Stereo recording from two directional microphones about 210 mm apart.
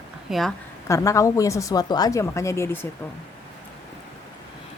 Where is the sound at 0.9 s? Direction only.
15° left (ahead or behind).